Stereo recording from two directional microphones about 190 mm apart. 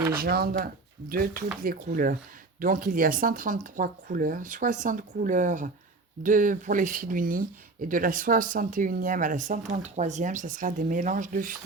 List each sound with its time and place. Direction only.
0.1 s speech: 55° right (ahead or behind)